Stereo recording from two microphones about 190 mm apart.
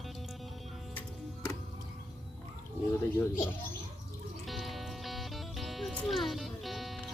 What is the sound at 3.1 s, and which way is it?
Speech, 15° left (ahead or behind).